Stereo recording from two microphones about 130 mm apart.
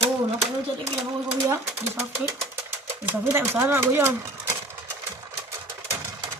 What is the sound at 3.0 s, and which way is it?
Speech, 15° right (ahead or behind).